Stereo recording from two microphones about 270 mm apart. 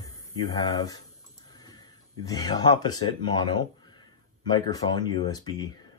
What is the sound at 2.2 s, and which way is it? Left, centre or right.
Speech, centre.